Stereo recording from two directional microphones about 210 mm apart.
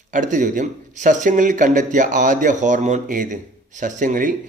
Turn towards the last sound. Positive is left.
turn(degrees=-40)  # may be behind; listen again after turning